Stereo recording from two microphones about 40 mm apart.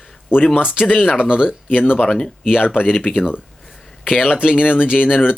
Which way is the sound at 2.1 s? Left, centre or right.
Centre.